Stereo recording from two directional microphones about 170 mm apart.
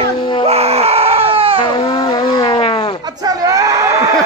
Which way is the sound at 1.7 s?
25° left (ahead or behind).